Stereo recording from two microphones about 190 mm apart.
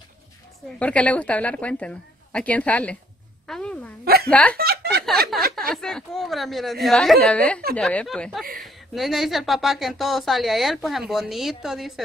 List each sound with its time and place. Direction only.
0.7 s a woman's voice: 5° left (ahead or behind)
4.0 s speech: 55° right (ahead or behind)
4.3 s a woman's voice: 5° left (ahead or behind)
4.6 s a sound: 55° right (ahead or behind)
5.3 s a woman's voice: centre (ahead or behind)